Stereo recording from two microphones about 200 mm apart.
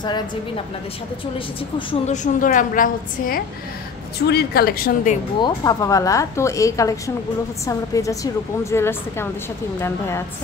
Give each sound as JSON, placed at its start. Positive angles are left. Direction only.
{"t": 1.9, "sound": "a woman's voice", "side_deg": 35}
{"t": 5.4, "sound": "a woman's voice", "side_deg": 20}